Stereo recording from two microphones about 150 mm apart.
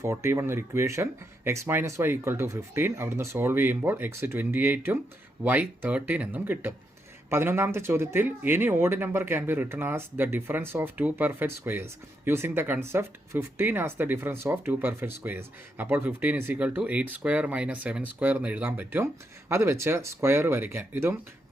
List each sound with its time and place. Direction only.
0.0 s speech: 20° right (ahead or behind)